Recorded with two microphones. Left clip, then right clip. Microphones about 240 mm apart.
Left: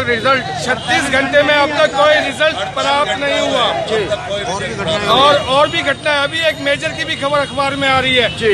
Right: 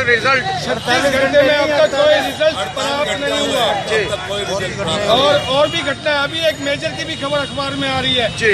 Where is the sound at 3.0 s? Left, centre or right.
Right.